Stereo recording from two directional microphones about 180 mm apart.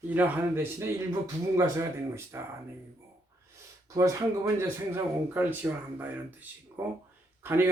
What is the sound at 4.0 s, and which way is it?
Speech, 15° right (ahead or behind).